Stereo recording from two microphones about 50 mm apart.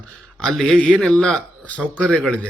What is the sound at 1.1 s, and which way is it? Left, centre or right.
Speech, left.